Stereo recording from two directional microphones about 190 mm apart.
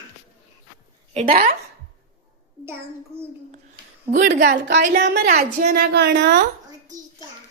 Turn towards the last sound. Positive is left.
turn(degrees=-60)  # may be behind; listen again after turning